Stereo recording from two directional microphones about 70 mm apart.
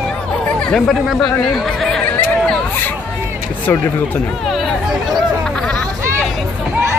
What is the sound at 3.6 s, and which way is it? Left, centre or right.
Speech, left.